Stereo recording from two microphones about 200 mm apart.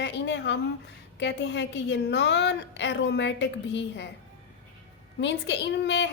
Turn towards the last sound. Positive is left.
turn(degrees=60)  # may be behind; listen again after turning